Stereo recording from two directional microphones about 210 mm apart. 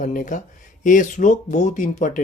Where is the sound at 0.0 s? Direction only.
40° left (ahead or behind).